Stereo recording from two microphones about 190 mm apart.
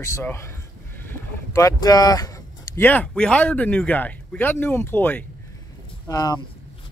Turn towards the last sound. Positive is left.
turn(degrees=20)  # may be behind; listen again after turning